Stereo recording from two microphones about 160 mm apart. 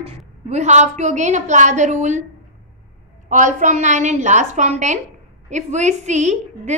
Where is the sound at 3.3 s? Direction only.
50° right (ahead or behind).